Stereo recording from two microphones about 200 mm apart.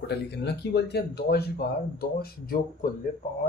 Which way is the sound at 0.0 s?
55° left (ahead or behind).